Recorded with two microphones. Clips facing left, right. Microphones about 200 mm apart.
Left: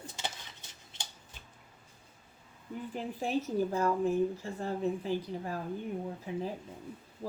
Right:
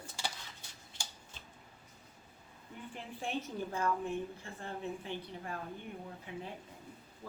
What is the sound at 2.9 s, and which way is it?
A woman's voice, 40° left (ahead or behind).